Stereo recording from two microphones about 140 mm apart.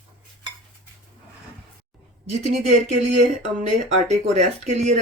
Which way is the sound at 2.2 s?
55° right (ahead or behind).